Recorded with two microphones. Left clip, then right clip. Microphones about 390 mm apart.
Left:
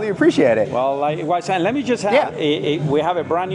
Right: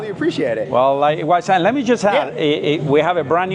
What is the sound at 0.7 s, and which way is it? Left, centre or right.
A man's voice, right.